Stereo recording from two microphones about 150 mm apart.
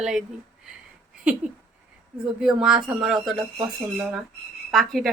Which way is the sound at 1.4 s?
5° right (ahead or behind).